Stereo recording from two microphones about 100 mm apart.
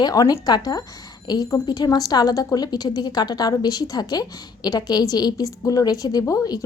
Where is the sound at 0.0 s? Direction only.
40° left (ahead or behind).